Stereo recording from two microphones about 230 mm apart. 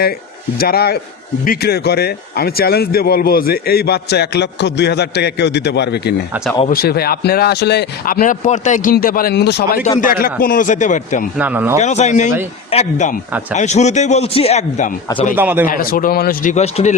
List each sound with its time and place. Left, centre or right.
0.6 s a man's voice: left
11.3 s speech: centre
11.8 s a man's voice: left
15.4 s speech: centre
15.6 s speech: left